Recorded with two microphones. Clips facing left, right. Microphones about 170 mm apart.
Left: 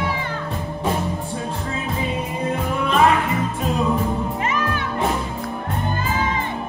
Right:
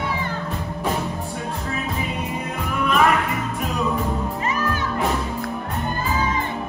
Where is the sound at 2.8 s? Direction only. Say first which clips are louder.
Left 1 dB; 30° left (ahead or behind).